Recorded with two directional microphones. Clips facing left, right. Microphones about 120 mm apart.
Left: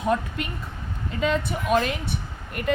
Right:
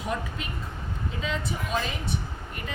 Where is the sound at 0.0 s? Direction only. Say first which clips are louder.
Left 7 dB; 65° left (ahead or behind).